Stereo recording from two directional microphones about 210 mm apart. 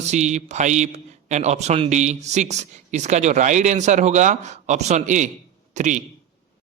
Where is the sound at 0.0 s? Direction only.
35° right (ahead or behind).